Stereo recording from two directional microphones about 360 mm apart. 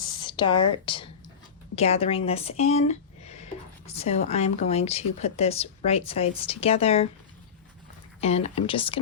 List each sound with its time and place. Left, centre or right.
0.0 s a sound: centre
1.7 s speech: centre
8.2 s speech: centre